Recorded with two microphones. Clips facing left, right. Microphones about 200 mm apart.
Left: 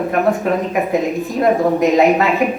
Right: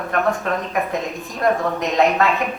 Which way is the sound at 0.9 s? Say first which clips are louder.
Left 8 dB; 5° left (ahead or behind).